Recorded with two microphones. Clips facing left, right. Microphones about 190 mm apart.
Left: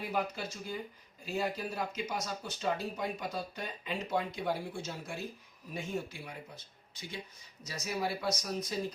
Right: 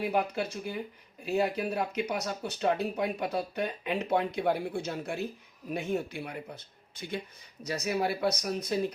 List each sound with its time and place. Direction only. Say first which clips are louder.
0.0 s speech: right 6 dB; 65° right (ahead or behind)
7.6 s speech: right 6 dB; 65° right (ahead or behind)